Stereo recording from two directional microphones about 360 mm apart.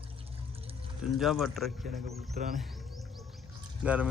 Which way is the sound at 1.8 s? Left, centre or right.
Centre.